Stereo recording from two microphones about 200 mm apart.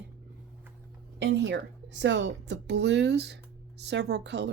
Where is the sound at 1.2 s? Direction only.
60° right (ahead or behind).